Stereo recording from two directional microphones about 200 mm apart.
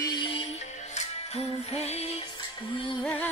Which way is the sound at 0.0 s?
25° left (ahead or behind).